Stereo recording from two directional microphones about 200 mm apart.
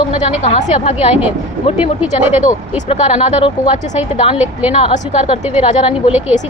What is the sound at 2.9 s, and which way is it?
Speech, 30° left (ahead or behind).